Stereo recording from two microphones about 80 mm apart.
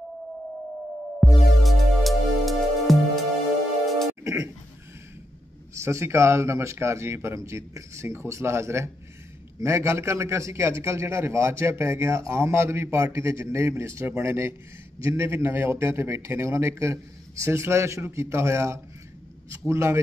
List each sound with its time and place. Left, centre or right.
1.2 s music: centre
4.2 s a sound: right
5.8 s a man's voice: right